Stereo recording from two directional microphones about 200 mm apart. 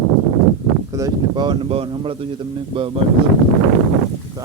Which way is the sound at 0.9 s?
20° right (ahead or behind).